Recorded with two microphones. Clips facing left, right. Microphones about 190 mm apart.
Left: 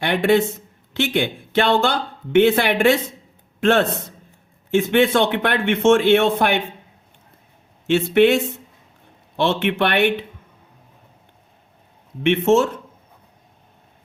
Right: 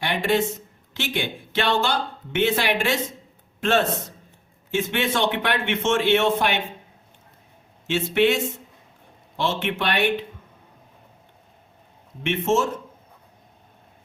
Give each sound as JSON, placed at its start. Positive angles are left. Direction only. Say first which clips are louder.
{"t": 0.0, "sound": "a man's voice", "louder": "left 5 dB", "side_deg": 60}
{"t": 7.9, "sound": "speech", "louder": "left 6 dB", "side_deg": 55}
{"t": 9.4, "sound": "speech", "louder": "left 6 dB", "side_deg": 60}
{"t": 12.2, "sound": "speech", "louder": "left 6 dB", "side_deg": 60}